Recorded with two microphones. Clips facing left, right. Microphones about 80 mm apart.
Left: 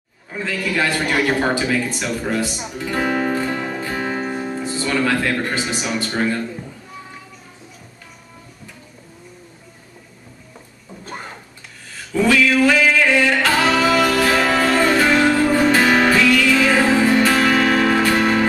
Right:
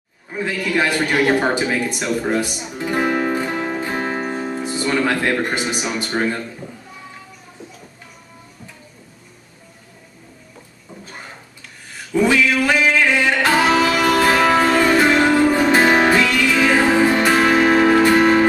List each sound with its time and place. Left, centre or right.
0.3 s a man's voice: centre
3.9 s music: right
12.1 s a sound: centre
13.2 s music: centre